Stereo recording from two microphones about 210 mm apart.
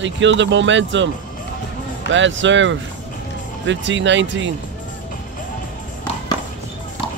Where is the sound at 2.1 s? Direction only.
60° right (ahead or behind).